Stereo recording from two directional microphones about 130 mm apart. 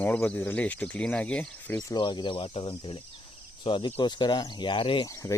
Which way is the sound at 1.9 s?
35° left (ahead or behind).